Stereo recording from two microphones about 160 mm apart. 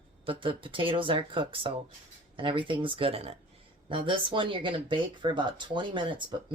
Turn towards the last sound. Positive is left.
turn(degrees=-30)  # may be behind; listen again after turning